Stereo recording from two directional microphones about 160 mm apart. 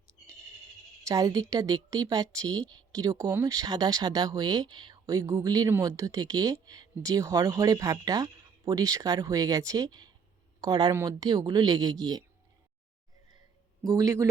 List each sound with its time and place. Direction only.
1.0 s speech: 20° right (ahead or behind)
13.8 s speech: 20° right (ahead or behind)